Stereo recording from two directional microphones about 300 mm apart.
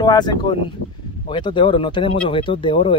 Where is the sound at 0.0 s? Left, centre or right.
Centre.